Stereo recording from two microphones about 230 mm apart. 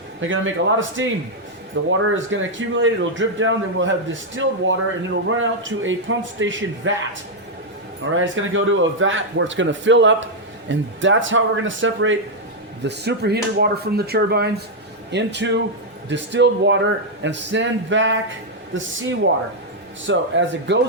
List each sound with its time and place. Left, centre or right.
0.2 s speech: right
8.1 s speech: right